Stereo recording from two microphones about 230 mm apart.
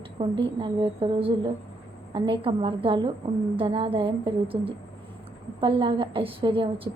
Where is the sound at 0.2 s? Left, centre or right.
Right.